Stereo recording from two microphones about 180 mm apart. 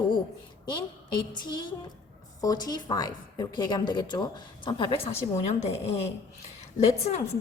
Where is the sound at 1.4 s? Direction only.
25° left (ahead or behind).